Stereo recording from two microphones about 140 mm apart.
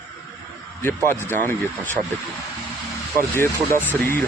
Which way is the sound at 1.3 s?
15° left (ahead or behind).